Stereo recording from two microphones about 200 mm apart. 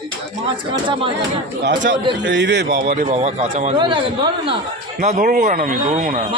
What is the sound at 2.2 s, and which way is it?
Speech, 60° right (ahead or behind).